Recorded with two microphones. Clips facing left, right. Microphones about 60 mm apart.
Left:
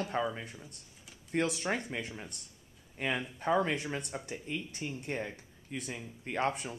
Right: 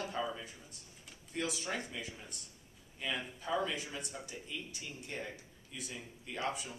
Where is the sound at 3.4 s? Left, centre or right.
Left.